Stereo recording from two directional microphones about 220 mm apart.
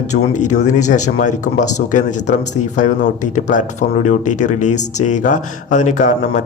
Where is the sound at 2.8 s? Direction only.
35° left (ahead or behind).